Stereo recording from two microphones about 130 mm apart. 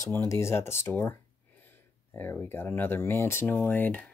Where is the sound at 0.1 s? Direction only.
20° left (ahead or behind).